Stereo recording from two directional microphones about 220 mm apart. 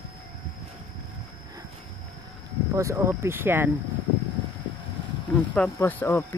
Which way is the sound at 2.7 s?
15° right (ahead or behind).